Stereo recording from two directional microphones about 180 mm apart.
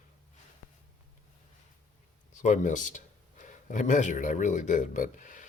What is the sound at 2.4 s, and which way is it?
Speech, 45° left (ahead or behind).